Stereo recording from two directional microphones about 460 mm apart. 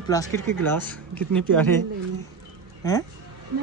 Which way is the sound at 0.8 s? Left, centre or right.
Centre.